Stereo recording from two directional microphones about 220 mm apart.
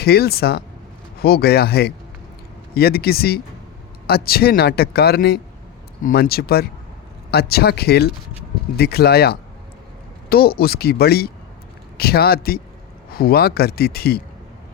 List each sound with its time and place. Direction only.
0.0 s a man's voice: 45° left (ahead or behind)